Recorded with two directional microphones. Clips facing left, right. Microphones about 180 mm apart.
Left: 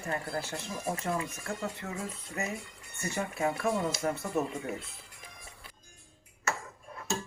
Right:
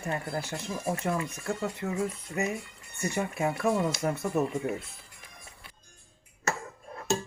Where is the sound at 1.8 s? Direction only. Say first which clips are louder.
Right 7 dB; 20° right (ahead or behind).